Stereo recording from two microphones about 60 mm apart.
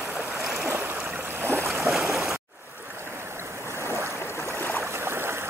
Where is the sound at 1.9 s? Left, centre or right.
Centre.